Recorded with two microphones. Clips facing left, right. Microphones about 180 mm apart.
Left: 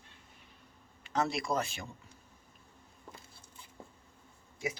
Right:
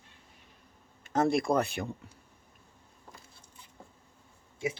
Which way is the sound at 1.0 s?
50° right (ahead or behind).